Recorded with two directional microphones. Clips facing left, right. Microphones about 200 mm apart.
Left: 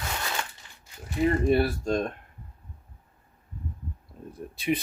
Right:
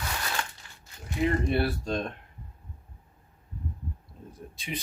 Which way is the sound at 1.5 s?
45° left (ahead or behind).